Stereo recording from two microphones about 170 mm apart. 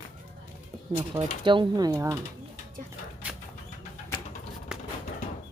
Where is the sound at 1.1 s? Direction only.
30° right (ahead or behind).